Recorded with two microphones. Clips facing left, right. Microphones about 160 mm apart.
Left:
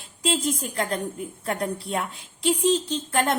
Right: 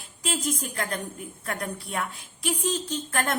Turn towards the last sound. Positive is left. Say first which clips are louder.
# left 4 dB
turn(degrees=25)  # may be behind; listen again after turning